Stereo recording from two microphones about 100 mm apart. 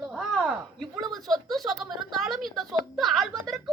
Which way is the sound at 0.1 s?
Centre (ahead or behind).